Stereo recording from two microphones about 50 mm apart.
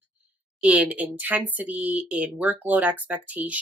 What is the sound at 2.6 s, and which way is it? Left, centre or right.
A woman's voice, right.